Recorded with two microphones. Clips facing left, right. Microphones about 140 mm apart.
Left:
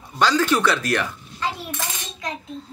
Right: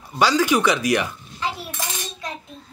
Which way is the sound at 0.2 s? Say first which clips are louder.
Right 1 dB; 10° right (ahead or behind).